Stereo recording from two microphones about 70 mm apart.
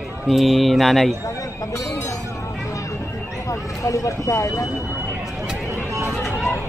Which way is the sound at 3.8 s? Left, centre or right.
Left.